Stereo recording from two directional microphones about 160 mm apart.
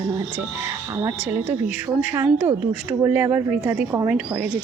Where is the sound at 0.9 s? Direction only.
15° right (ahead or behind).